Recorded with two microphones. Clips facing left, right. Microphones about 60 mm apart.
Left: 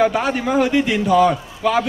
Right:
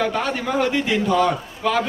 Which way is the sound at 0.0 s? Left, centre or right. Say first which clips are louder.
Left 5 dB; centre.